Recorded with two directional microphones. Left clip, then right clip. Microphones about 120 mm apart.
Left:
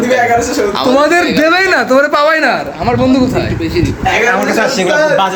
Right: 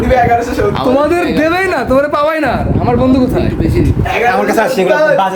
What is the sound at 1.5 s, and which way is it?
Speech, 20° right (ahead or behind).